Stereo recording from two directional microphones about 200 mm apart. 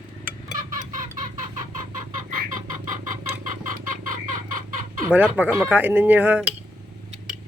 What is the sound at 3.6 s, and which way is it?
Chicken, 40° right (ahead or behind).